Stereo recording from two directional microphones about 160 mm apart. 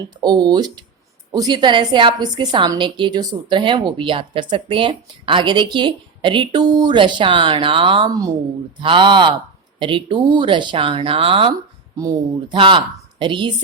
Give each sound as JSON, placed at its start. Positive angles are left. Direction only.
{"t": 0.2, "sound": "a woman's voice", "side_deg": -25}
{"t": 11.9, "sound": "a woman's voice", "side_deg": -20}
{"t": 12.5, "sound": "a woman's voice", "side_deg": -30}